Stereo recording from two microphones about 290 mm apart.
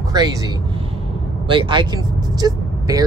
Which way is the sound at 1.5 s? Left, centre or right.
Centre.